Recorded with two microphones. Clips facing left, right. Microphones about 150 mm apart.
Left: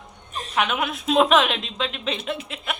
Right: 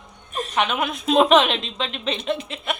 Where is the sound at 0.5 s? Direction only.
Centre (ahead or behind).